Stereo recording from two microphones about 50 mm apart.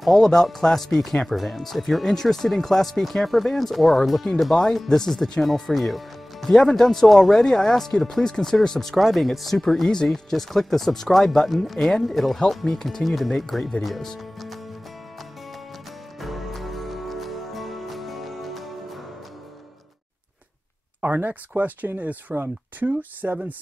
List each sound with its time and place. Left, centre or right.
0.0 s speech: centre
16.2 s music: centre
21.0 s speech: right